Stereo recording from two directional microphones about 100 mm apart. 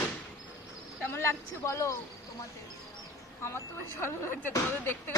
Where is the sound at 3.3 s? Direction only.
25° left (ahead or behind).